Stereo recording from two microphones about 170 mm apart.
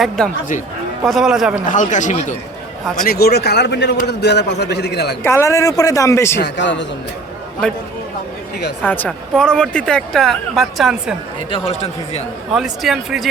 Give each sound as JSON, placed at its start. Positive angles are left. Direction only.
{"t": 1.0, "sound": "speech", "side_deg": 0}
{"t": 1.6, "sound": "speech", "side_deg": 50}
{"t": 3.0, "sound": "a man's voice", "side_deg": 65}
{"t": 5.2, "sound": "a woman's voice", "side_deg": 15}
{"t": 6.4, "sound": "a man's voice", "side_deg": 90}
{"t": 8.9, "sound": "speech", "side_deg": 5}
{"t": 11.5, "sound": "speech", "side_deg": 35}
{"t": 12.5, "sound": "speech", "side_deg": 0}